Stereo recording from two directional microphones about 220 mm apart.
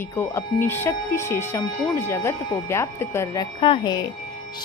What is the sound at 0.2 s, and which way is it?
A woman's voice, 10° left (ahead or behind).